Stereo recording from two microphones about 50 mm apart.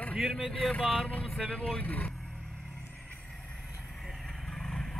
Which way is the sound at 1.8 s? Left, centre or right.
Left.